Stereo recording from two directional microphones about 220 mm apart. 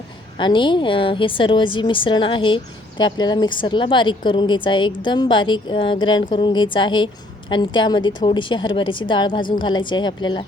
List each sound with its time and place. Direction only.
0.3 s a woman's voice: 20° left (ahead or behind)